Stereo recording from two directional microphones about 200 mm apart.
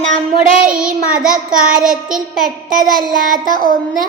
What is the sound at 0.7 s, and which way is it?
Child singing, 5° right (ahead or behind).